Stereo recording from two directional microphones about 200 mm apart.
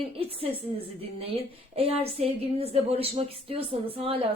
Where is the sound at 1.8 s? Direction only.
30° right (ahead or behind).